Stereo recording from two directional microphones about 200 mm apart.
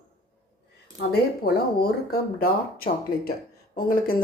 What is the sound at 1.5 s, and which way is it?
Speech, 50° left (ahead or behind).